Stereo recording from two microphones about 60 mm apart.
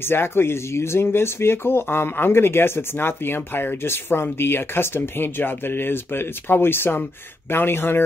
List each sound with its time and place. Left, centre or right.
0.1 s speech: left